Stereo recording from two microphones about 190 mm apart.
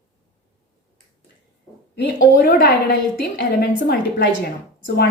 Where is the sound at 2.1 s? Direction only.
50° left (ahead or behind).